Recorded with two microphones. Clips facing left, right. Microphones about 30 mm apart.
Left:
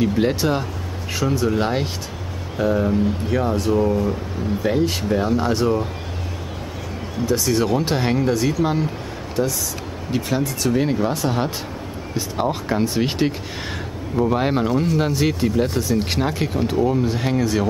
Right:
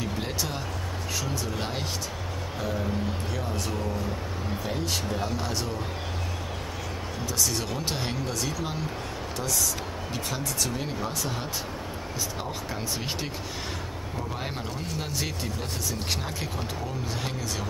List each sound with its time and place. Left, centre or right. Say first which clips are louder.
0.0 s speech: left 12 dB; left
4.6 s speech: left 11 dB; centre
7.2 s speech: left 11 dB; centre
16.1 s speech: left 10 dB; left